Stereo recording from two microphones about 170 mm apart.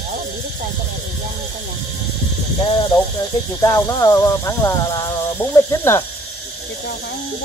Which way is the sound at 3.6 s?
15° left (ahead or behind).